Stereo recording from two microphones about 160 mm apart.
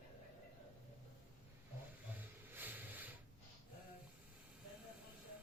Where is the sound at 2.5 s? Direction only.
10° right (ahead or behind).